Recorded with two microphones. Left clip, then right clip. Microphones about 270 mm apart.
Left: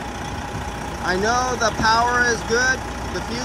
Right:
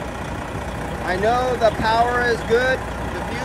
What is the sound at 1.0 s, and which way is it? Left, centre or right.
Speech, centre.